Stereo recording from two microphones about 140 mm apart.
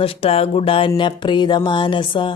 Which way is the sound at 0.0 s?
45° left (ahead or behind).